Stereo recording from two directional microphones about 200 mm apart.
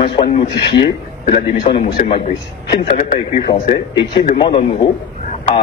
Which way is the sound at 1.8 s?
40° left (ahead or behind).